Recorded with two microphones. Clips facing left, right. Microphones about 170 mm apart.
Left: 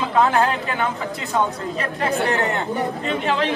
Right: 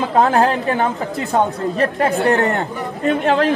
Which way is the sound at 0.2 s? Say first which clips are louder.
Right 3 dB; 40° right (ahead or behind).